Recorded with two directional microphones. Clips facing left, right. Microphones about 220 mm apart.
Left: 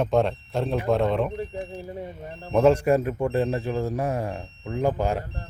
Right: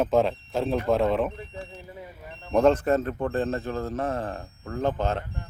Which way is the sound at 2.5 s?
5° left (ahead or behind).